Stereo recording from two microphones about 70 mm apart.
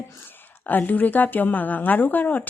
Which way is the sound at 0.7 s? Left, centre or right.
Left.